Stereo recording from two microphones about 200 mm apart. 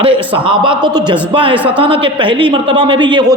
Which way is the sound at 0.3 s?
25° right (ahead or behind).